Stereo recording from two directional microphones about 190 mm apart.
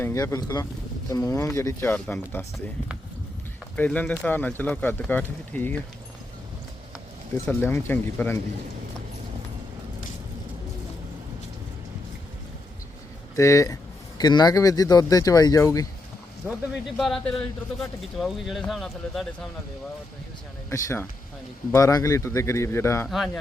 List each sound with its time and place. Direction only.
0.0 s speech: 15° left (ahead or behind)
3.8 s speech: 10° left (ahead or behind)
7.4 s speech: 10° left (ahead or behind)
13.3 s speech: 15° left (ahead or behind)
17.0 s speech: centre (ahead or behind)
20.7 s speech: 15° left (ahead or behind)
23.0 s speech: centre (ahead or behind)